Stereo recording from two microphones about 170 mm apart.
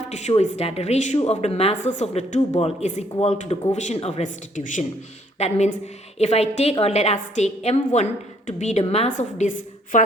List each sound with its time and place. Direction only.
0.1 s a woman's voice: 40° left (ahead or behind)
8.8 s a woman's voice: 35° left (ahead or behind); by 10.0 s 50° left (ahead or behind)